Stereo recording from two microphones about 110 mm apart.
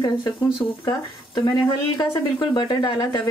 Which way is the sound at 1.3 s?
35° left (ahead or behind).